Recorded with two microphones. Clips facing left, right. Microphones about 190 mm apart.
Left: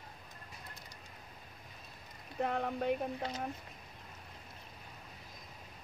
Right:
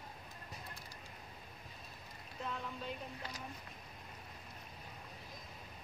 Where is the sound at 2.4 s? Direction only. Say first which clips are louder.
Left 10 dB; 60° left (ahead or behind).